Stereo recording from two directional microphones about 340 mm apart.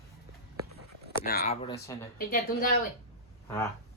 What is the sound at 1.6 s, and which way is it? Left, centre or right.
Speech, centre.